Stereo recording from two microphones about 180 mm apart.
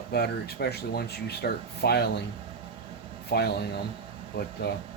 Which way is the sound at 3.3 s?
65° left (ahead or behind).